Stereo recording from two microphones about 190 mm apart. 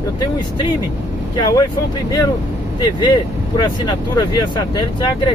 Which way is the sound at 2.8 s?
20° left (ahead or behind).